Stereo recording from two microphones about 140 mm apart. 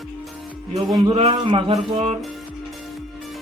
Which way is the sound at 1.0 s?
40° right (ahead or behind).